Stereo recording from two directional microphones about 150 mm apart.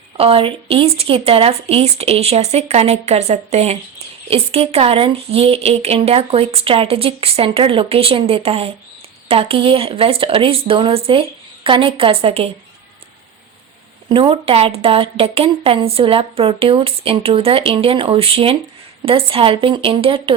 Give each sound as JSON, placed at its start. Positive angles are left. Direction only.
{"t": 0.2, "sound": "speech", "side_deg": -40}
{"t": 14.1, "sound": "speech", "side_deg": -35}